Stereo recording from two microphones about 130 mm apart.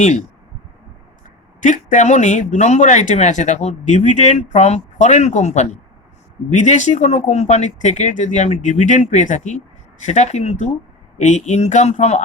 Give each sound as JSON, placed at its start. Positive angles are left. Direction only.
{"t": 0.0, "sound": "speech", "side_deg": 65}
{"t": 1.6, "sound": "speech", "side_deg": 75}